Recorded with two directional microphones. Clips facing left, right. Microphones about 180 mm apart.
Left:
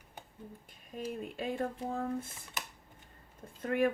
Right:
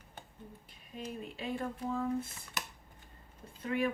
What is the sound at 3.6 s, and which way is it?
Speech, 50° left (ahead or behind).